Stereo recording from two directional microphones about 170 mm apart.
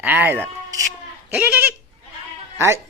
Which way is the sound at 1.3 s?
10° right (ahead or behind).